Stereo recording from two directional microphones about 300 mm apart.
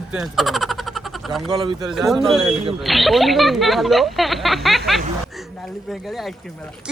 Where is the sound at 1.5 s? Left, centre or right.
Centre.